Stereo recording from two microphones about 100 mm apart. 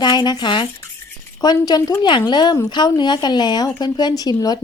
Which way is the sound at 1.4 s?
40° left (ahead or behind).